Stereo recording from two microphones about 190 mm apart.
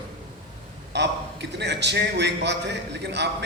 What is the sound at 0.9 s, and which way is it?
A man's voice, 65° right (ahead or behind).